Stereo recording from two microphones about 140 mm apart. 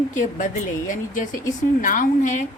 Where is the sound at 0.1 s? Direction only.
65° left (ahead or behind).